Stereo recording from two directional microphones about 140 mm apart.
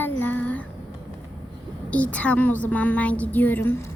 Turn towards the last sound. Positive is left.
turn(degrees=15)  # may be behind; listen again after turning